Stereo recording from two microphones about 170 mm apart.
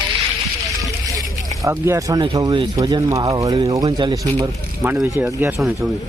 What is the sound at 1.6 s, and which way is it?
Speech, 15° right (ahead or behind).